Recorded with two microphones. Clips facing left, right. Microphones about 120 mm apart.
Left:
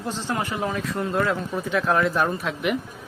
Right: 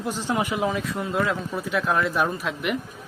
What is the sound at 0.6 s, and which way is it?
Speech, 5° right (ahead or behind).